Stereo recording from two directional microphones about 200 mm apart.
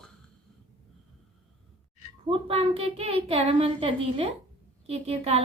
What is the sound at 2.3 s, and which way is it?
A woman's voice, 30° right (ahead or behind).